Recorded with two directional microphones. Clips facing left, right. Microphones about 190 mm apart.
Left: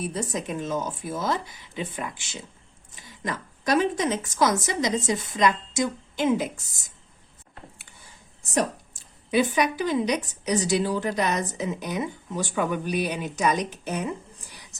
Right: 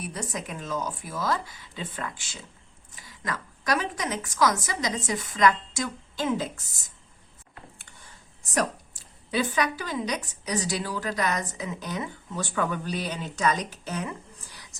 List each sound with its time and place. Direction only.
0.0 s a woman's voice: 25° left (ahead or behind)
8.5 s a woman's voice: 20° left (ahead or behind)